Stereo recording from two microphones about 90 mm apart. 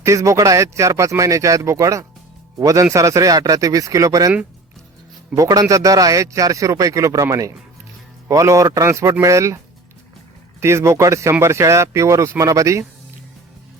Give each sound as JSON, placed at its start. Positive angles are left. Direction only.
{"t": 0.0, "sound": "a man's voice", "side_deg": -35}
{"t": 5.3, "sound": "a man's voice", "side_deg": -40}
{"t": 10.6, "sound": "a man's voice", "side_deg": -30}